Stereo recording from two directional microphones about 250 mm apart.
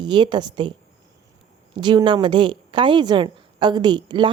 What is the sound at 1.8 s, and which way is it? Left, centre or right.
A woman's voice, centre.